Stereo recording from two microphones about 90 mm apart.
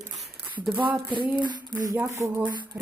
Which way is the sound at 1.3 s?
55° right (ahead or behind).